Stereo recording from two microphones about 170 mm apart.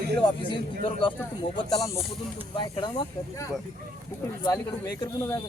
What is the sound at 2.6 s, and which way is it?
Speech, 30° left (ahead or behind).